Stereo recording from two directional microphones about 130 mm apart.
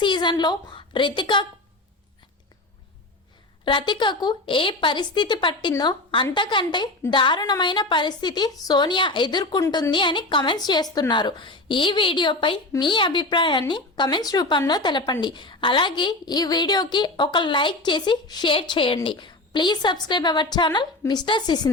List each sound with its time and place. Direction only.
0.0 s a woman's voice: 35° left (ahead or behind)
3.6 s a woman's voice: 35° left (ahead or behind)